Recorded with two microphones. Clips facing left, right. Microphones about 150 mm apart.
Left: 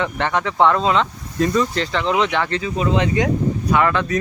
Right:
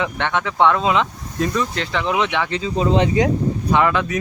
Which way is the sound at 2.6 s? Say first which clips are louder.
Right 5 dB; 30° right (ahead or behind).